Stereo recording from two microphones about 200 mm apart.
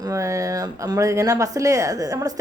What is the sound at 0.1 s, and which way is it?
A woman's voice, 15° right (ahead or behind).